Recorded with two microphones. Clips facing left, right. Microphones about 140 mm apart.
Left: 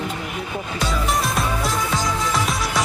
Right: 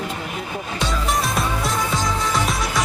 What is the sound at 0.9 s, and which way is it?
Music, centre (ahead or behind).